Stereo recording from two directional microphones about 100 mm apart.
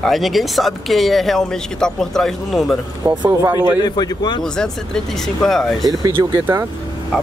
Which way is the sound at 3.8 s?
45° left (ahead or behind).